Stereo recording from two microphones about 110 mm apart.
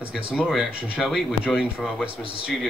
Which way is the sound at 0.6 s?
Centre (ahead or behind).